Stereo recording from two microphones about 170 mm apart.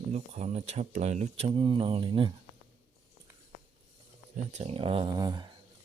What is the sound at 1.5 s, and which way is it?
Speech, 30° right (ahead or behind).